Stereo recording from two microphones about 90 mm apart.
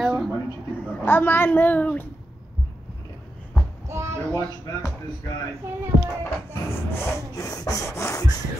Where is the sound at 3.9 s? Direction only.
30° right (ahead or behind).